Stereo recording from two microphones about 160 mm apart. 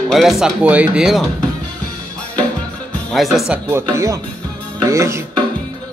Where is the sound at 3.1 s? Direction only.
Centre (ahead or behind).